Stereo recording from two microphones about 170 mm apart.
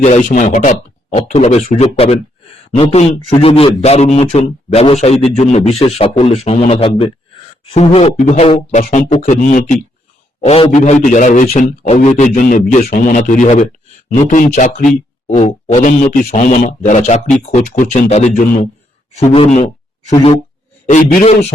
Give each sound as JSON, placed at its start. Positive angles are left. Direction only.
{"t": 0.0, "sound": "a man's voice", "side_deg": 45}
{"t": 10.4, "sound": "a man's voice", "side_deg": 35}
{"t": 11.9, "sound": "a man's voice", "side_deg": 45}
{"t": 20.9, "sound": "a man's voice", "side_deg": 55}